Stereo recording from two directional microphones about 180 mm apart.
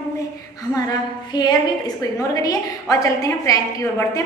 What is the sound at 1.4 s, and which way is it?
A woman's voice, 25° left (ahead or behind).